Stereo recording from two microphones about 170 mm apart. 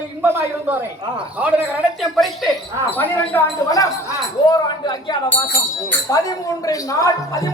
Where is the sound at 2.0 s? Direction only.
Centre (ahead or behind); by 7.5 s 20° left (ahead or behind).